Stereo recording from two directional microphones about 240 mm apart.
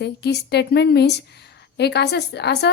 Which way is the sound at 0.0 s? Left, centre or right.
Left.